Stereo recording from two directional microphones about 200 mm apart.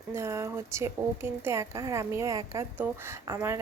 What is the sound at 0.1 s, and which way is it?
A woman's voice, 15° right (ahead or behind).